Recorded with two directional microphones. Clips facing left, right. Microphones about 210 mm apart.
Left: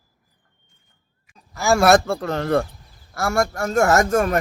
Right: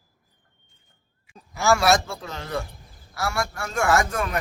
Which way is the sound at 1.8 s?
55° left (ahead or behind).